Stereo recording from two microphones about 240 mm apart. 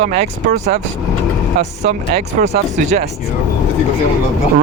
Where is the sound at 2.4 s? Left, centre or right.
Right.